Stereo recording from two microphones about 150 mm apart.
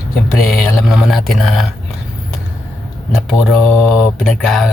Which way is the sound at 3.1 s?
Centre (ahead or behind).